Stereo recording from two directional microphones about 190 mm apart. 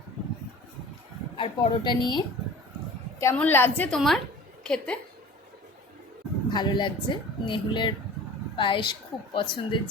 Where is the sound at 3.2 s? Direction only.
10° left (ahead or behind).